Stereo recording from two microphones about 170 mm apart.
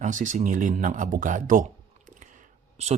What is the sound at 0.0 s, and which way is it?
Speech, 50° right (ahead or behind).